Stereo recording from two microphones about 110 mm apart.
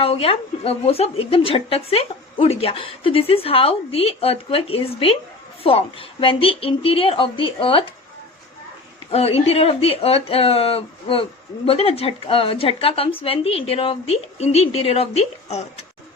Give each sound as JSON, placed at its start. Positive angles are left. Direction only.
{"t": 0.0, "sound": "a woman's voice", "side_deg": 60}
{"t": 9.0, "sound": "a woman's voice", "side_deg": 65}